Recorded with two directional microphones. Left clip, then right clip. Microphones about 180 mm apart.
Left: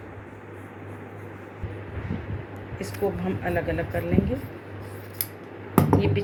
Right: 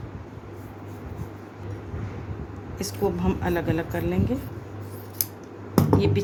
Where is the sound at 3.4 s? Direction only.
55° right (ahead or behind).